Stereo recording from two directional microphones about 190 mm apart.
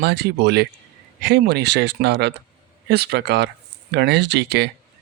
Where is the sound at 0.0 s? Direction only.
60° right (ahead or behind).